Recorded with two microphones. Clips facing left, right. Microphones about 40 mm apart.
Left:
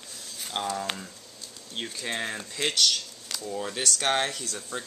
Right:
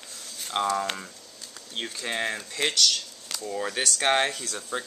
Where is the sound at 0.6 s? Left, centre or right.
Centre.